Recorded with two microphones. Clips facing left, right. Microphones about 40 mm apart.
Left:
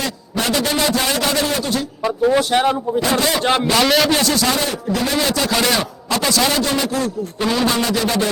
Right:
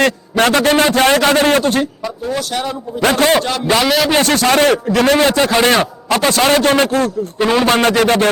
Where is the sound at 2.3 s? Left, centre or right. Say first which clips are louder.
Left 4 dB; left.